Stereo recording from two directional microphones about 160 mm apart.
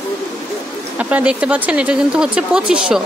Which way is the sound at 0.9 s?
10° right (ahead or behind).